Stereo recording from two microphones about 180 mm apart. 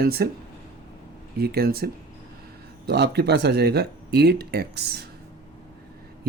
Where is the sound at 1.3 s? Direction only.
60° right (ahead or behind).